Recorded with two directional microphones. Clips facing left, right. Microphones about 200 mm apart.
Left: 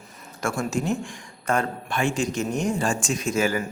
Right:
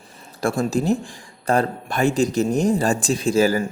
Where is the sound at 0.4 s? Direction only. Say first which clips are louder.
Right 5 dB; 35° right (ahead or behind).